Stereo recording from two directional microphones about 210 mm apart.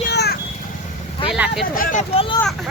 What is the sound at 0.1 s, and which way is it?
Vehicle, 50° left (ahead or behind).